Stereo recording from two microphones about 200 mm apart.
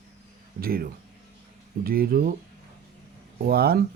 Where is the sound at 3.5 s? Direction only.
50° right (ahead or behind).